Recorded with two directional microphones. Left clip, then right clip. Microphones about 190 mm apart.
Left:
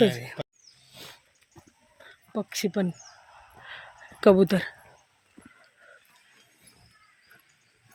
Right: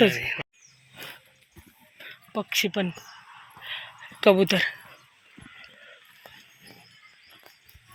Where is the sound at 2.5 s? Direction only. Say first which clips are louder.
Right 4 dB; 25° left (ahead or behind).